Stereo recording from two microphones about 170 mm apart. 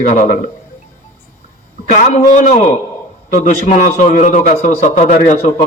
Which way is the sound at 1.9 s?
50° left (ahead or behind).